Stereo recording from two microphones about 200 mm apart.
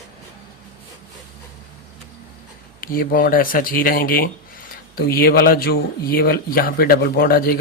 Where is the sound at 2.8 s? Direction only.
45° left (ahead or behind).